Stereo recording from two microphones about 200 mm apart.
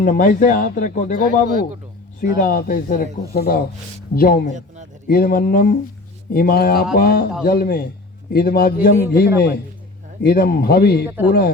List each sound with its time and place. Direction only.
0.0 s speech: 45° left (ahead or behind)